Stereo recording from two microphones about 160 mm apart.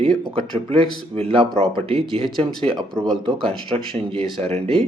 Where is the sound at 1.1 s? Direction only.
35° right (ahead or behind).